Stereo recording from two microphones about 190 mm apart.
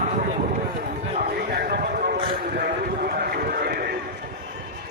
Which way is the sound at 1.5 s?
50° right (ahead or behind).